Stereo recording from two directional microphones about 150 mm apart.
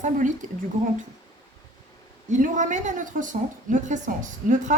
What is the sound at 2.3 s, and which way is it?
A woman's voice, 55° right (ahead or behind).